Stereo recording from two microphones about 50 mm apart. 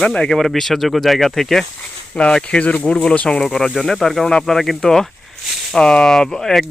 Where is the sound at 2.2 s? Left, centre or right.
Left.